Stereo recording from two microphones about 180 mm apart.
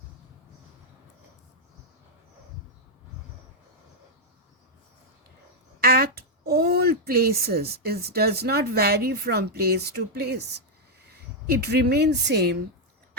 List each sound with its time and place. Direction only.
5.8 s speech: 60° right (ahead or behind)